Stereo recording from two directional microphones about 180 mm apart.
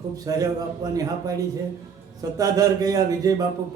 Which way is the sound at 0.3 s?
20° right (ahead or behind).